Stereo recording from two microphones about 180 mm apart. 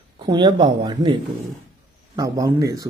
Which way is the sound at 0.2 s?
25° right (ahead or behind).